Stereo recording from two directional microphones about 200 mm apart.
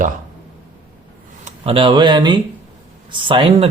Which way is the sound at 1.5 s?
30° right (ahead or behind).